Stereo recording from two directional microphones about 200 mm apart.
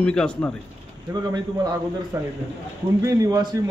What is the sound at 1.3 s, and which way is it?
A man's voice, 20° right (ahead or behind).